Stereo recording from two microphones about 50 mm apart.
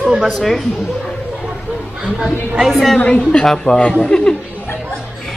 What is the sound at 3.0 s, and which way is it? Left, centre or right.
A woman's voice, left.